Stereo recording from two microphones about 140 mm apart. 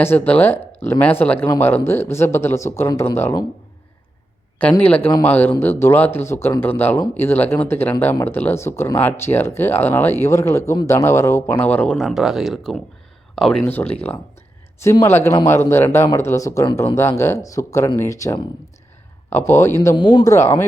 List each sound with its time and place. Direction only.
0.0 s speech: 15° left (ahead or behind)
5.2 s speech: 15° left (ahead or behind)
14.8 s speech: 20° left (ahead or behind)
20.0 s speech: 30° left (ahead or behind)